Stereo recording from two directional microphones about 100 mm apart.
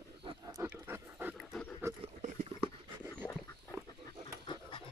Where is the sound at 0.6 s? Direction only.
20° right (ahead or behind).